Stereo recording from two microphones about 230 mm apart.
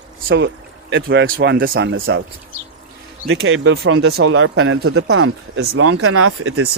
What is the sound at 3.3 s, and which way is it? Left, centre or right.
Speech, right.